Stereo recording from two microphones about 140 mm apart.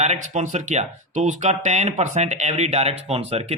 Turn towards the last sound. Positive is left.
turn(degrees=-45)  # may be behind; listen again after turning